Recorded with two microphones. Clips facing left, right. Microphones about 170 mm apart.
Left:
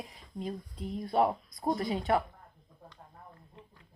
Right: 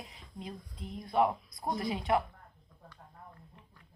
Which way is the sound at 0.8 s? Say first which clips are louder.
Left 6 dB; centre (ahead or behind).